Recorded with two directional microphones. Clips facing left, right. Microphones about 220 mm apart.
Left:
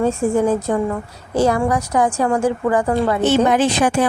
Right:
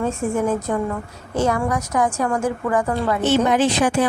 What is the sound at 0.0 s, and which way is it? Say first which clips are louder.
A woman's voice: left 5 dB; 30° left (ahead or behind).